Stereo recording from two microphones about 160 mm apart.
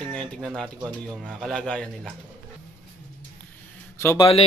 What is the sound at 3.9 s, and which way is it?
Speech, 15° left (ahead or behind).